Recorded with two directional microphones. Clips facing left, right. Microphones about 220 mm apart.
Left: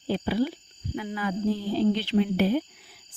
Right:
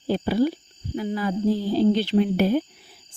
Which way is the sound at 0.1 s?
40° right (ahead or behind).